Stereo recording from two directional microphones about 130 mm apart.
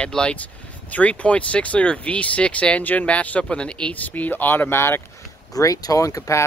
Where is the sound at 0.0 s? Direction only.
5° left (ahead or behind).